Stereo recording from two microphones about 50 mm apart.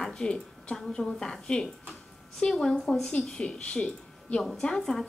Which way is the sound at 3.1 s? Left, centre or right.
Left.